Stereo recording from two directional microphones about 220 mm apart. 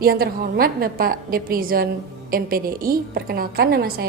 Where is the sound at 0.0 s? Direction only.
45° right (ahead or behind).